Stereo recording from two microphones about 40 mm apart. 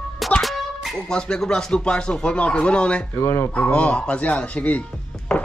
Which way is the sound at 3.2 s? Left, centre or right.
Left.